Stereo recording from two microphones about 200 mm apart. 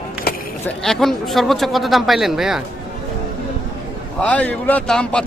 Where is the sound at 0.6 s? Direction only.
Centre (ahead or behind).